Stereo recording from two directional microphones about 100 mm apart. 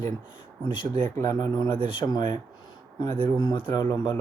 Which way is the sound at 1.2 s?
40° left (ahead or behind).